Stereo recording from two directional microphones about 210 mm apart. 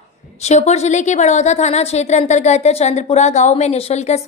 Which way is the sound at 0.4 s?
30° left (ahead or behind).